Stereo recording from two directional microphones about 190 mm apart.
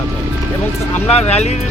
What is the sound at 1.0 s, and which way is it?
Speech, 35° left (ahead or behind).